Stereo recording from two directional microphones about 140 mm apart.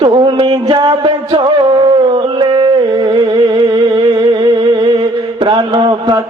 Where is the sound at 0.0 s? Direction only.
35° right (ahead or behind).